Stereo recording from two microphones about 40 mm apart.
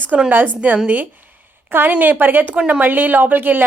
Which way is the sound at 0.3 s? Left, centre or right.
Right.